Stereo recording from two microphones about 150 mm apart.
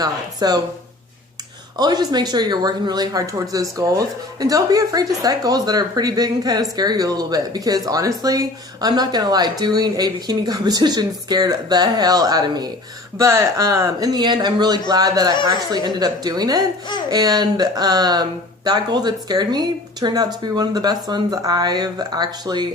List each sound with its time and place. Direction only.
0.0 s speech: 25° right (ahead or behind)
1.8 s speech: 25° right (ahead or behind)